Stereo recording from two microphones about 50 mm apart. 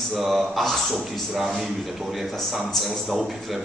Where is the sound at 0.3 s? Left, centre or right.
Centre.